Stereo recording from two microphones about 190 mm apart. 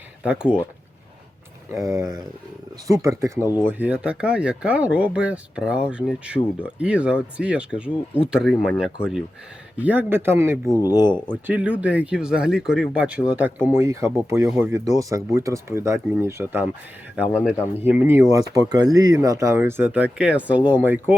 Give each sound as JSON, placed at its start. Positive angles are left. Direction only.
{"t": 0.2, "sound": "speech", "side_deg": -5}
{"t": 1.7, "sound": "speech", "side_deg": -20}
{"t": 10.8, "sound": "speech", "side_deg": 20}
{"t": 11.4, "sound": "speech", "side_deg": -10}
{"t": 17.7, "sound": "speech", "side_deg": -10}